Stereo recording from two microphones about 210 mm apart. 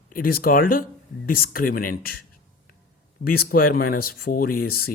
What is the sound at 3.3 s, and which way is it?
Speech, 45° left (ahead or behind).